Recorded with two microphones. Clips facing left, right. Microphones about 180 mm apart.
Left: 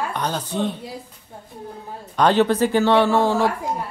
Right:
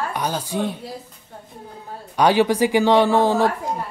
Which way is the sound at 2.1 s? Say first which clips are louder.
Even; 10° right (ahead or behind).